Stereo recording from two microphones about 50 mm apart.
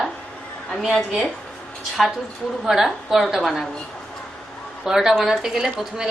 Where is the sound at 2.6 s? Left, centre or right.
Centre.